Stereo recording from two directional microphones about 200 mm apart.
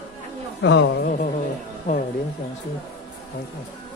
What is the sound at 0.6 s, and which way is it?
Speech, 70° left (ahead or behind).